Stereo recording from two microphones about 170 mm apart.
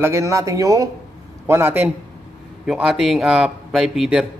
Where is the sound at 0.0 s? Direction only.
15° right (ahead or behind).